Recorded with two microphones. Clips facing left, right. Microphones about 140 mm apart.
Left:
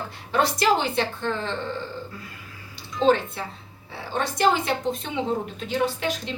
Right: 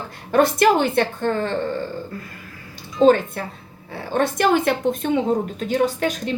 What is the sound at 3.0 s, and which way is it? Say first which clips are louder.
A woman's voice: right 6 dB; 50° right (ahead or behind).